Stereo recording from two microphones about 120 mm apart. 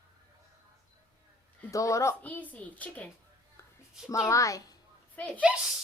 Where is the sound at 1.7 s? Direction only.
25° left (ahead or behind).